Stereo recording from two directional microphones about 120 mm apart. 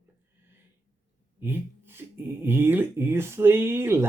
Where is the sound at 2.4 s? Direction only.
20° right (ahead or behind).